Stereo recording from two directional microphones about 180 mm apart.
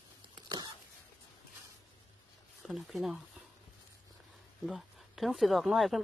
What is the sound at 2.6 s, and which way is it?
Speech, centre (ahead or behind).